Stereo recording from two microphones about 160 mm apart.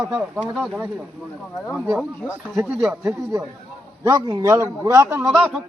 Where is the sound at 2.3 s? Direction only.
10° right (ahead or behind).